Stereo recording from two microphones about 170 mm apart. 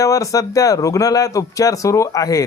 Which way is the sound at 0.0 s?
20° left (ahead or behind).